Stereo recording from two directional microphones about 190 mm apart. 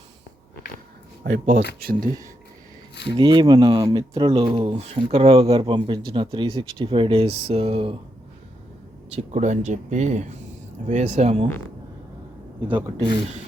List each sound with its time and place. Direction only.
1.2 s speech: 60° right (ahead or behind)
1.8 s speech: 50° right (ahead or behind)
3.1 s speech: 25° right (ahead or behind)
9.0 s speech: 35° right (ahead or behind)
12.7 s speech: 25° right (ahead or behind)